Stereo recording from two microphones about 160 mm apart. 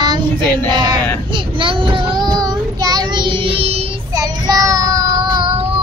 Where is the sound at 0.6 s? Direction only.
25° right (ahead or behind).